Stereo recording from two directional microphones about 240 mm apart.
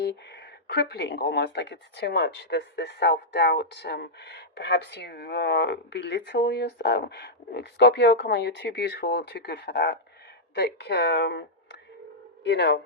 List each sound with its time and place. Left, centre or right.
0.0 s speech: left